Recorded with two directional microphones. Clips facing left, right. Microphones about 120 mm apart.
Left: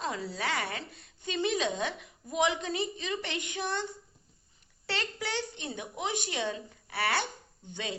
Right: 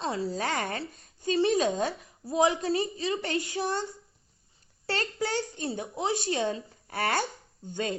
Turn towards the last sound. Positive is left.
turn(degrees=-45)  # may be behind; listen again after turning